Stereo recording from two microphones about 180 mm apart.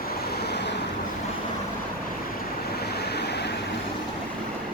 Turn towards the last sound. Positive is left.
turn(degrees=65)  # may be behind; listen again after turning